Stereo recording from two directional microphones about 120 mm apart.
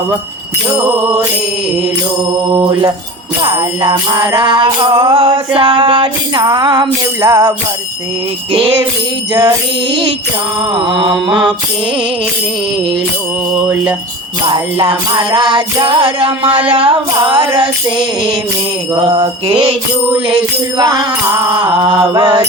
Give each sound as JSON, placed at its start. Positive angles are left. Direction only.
{"t": 3.4, "sound": "music", "side_deg": -40}
{"t": 9.3, "sound": "music", "side_deg": -35}
{"t": 13.5, "sound": "jingle bell", "side_deg": -10}
{"t": 14.4, "sound": "music", "side_deg": -40}
{"t": 20.7, "sound": "music", "side_deg": -40}
{"t": 22.1, "sound": "music", "side_deg": -40}